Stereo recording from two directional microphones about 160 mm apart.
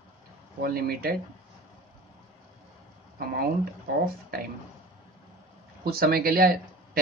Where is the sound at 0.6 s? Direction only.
70° right (ahead or behind).